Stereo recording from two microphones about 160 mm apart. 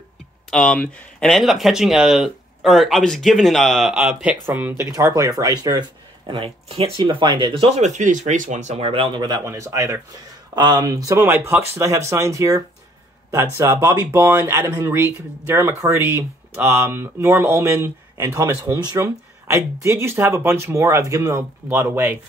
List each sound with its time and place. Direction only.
0.5 s speech: 5° left (ahead or behind); by 22.2 s 15° right (ahead or behind)